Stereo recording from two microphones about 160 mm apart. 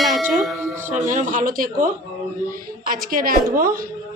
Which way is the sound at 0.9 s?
50° right (ahead or behind).